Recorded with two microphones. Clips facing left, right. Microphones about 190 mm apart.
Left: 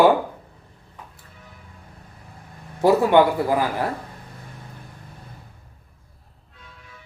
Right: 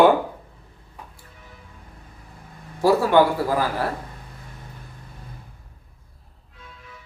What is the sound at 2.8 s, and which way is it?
Speech, 20° left (ahead or behind).